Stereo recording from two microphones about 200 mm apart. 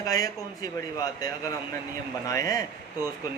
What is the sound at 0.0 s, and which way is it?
A man's voice, 20° left (ahead or behind).